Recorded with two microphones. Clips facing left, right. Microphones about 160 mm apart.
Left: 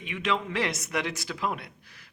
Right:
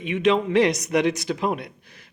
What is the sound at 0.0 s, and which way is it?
A man's voice, 20° right (ahead or behind).